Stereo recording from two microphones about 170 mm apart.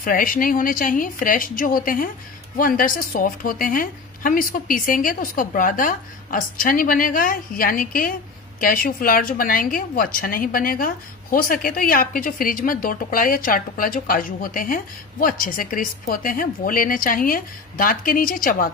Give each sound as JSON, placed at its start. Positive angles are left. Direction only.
{"t": 0.0, "sound": "a woman's voice", "side_deg": 55}